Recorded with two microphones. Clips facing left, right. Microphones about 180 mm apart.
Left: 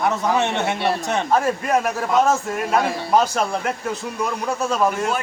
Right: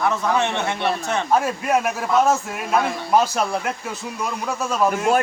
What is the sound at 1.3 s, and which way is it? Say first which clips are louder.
Speech: even; 5° right (ahead or behind).